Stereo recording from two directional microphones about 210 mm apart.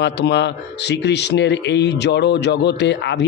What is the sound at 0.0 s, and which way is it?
Speech, 55° left (ahead or behind).